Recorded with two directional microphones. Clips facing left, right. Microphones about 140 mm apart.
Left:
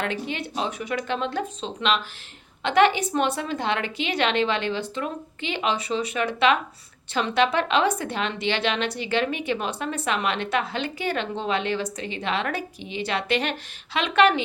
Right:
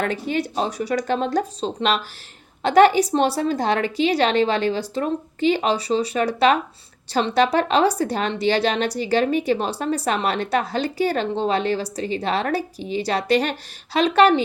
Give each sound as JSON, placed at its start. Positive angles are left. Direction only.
{"t": 0.0, "sound": "a woman's voice", "side_deg": -40}